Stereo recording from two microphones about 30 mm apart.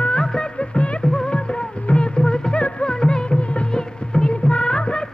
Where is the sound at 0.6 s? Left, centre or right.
Left.